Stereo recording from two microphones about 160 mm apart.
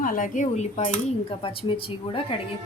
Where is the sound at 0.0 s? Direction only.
55° left (ahead or behind); by 2.2 s 35° left (ahead or behind).